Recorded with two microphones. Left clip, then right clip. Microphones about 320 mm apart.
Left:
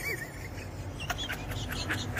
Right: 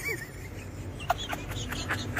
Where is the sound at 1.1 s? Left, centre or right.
Centre.